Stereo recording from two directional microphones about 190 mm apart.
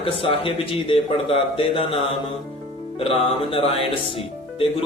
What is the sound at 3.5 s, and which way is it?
Speech, 30° left (ahead or behind).